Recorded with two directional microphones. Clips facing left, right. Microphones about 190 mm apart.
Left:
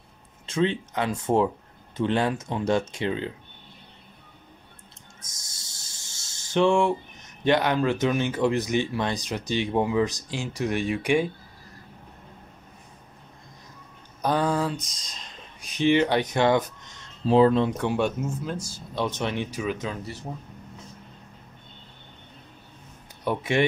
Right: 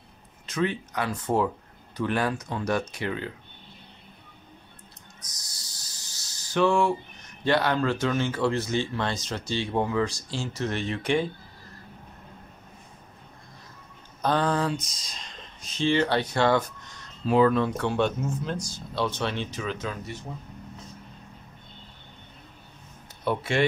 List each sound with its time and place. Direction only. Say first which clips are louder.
0.5 s speech: left 3 dB; 25° left (ahead or behind)
5.2 s speech: even; 25° left (ahead or behind)
14.2 s speech: left 1 dB; 10° left (ahead or behind)
15.6 s speech: left 3 dB; 15° left (ahead or behind)
18.7 s speech: even; 20° left (ahead or behind)
23.2 s speech: left 1 dB; 15° left (ahead or behind)